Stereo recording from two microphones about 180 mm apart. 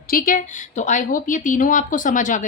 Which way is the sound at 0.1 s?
50° left (ahead or behind).